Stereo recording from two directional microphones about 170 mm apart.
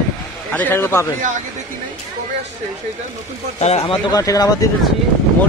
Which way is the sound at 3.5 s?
40° left (ahead or behind).